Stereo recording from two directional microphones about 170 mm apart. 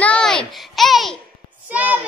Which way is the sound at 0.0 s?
5° left (ahead or behind).